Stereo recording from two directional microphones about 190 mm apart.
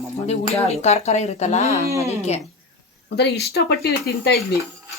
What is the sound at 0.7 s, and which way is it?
Speech, 35° left (ahead or behind).